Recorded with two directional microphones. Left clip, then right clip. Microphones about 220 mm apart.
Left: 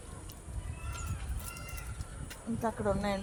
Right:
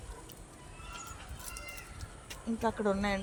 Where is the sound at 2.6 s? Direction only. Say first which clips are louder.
Right 1 dB; 30° right (ahead or behind).